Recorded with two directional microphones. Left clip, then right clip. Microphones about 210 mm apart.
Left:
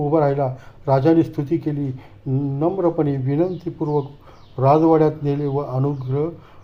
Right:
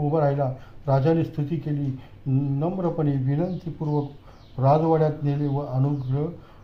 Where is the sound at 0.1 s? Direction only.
35° left (ahead or behind).